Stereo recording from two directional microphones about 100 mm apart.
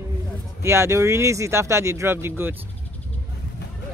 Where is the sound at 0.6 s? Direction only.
25° right (ahead or behind).